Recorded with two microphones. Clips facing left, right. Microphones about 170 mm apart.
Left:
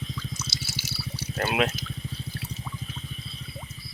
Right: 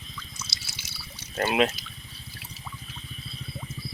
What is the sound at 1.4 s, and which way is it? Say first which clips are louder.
Cricket: right 2 dB; centre (ahead or behind).